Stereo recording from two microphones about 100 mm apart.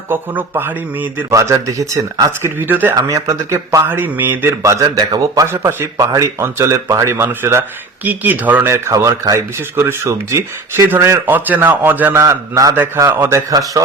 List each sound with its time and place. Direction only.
0.1 s speech: 20° right (ahead or behind)
1.3 s a man's voice: 35° right (ahead or behind)
2.6 s speech: 20° right (ahead or behind)
2.9 s a man's voice: 35° right (ahead or behind)
3.8 s a man's voice: 20° right (ahead or behind); by 5.5 s 40° right (ahead or behind)
5.5 s speech: 25° right (ahead or behind)
6.0 s a man's voice: 35° right (ahead or behind); by 8.7 s 20° right (ahead or behind)
8.7 s speech: 30° right (ahead or behind)
13.5 s a man's voice: 40° right (ahead or behind)